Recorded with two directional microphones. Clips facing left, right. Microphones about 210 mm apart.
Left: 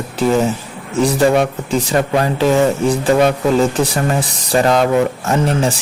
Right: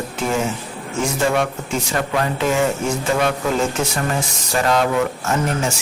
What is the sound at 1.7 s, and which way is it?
A man's voice, 35° left (ahead or behind).